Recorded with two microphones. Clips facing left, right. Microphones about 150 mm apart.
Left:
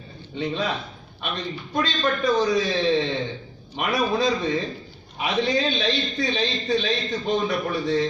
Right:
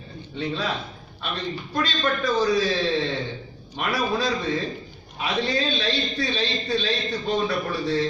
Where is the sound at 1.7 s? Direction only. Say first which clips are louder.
Left 2 dB; 20° left (ahead or behind).